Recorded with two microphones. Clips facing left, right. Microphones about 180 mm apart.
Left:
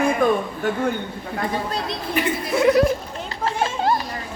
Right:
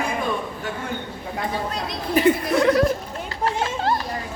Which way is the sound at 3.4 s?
25° left (ahead or behind).